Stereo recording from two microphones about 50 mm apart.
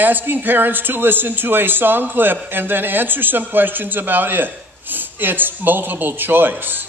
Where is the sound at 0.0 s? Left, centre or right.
Right.